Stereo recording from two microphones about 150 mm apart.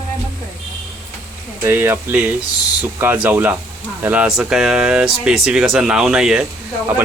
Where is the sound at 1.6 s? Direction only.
15° right (ahead or behind).